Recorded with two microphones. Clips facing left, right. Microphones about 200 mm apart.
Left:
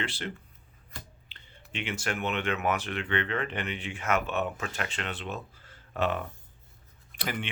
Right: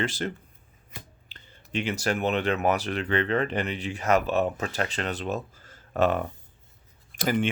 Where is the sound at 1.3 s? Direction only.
40° right (ahead or behind).